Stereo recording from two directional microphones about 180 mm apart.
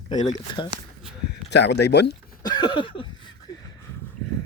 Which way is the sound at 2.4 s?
25° left (ahead or behind).